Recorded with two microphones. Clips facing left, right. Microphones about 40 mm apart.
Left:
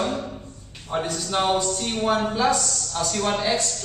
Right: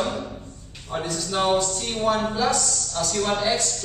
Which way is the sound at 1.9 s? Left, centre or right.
Centre.